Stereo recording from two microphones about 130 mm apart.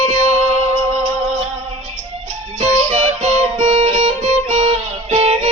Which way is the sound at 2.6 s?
55° right (ahead or behind).